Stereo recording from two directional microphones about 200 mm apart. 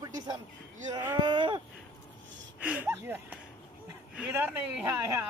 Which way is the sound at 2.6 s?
10° right (ahead or behind).